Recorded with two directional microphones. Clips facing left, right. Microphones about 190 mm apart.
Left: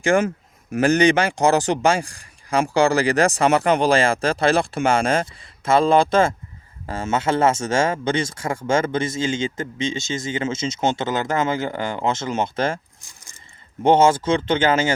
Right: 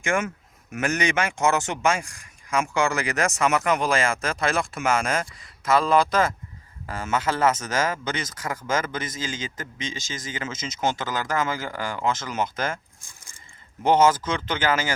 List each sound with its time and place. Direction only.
0.0 s speech: 35° left (ahead or behind)
13.8 s speech: 25° left (ahead or behind)